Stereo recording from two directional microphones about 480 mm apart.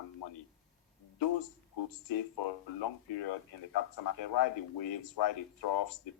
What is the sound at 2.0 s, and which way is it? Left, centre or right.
Speech, left.